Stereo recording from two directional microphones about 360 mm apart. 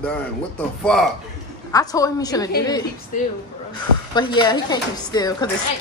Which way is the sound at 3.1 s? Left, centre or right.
Left.